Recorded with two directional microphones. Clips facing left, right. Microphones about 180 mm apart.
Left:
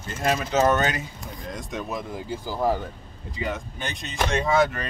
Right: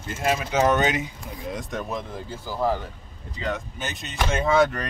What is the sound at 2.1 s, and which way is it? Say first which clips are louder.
Speech: left 2 dB; 15° left (ahead or behind).